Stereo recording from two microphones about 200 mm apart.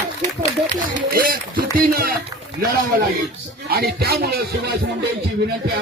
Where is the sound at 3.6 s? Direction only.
50° right (ahead or behind).